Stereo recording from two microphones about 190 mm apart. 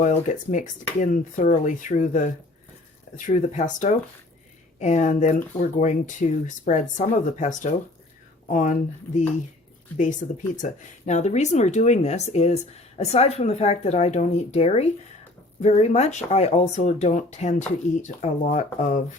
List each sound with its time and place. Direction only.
0.0 s speech: 40° left (ahead or behind)
10.6 s speech: 40° left (ahead or behind)